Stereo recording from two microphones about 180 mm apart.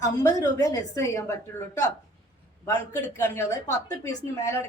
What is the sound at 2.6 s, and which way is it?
A woman's voice, 15° left (ahead or behind).